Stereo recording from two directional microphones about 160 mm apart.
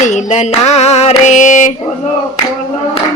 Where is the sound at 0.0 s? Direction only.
50° left (ahead or behind).